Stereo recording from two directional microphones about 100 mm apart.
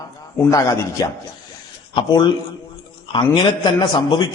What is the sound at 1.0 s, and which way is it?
Speech, 35° left (ahead or behind).